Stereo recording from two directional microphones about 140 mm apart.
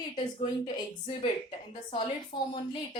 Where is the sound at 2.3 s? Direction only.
35° left (ahead or behind).